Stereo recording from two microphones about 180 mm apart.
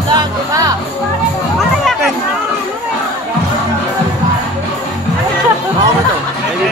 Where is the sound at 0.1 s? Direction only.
25° right (ahead or behind).